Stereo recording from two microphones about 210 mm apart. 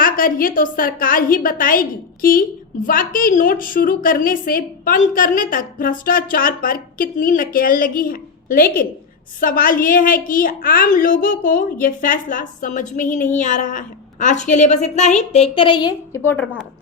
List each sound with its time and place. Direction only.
0.0 s a woman's voice: 40° left (ahead or behind); by 16.5 s 10° left (ahead or behind)